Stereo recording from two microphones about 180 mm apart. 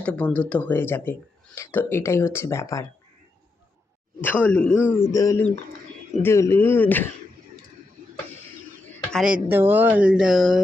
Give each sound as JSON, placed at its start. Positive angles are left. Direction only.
{"t": 0.0, "sound": "speech", "side_deg": 5}
{"t": 4.2, "sound": "speech", "side_deg": 10}
{"t": 5.1, "sound": "speech", "side_deg": 15}
{"t": 8.0, "sound": "music", "side_deg": -45}
{"t": 9.1, "sound": "speech", "side_deg": -5}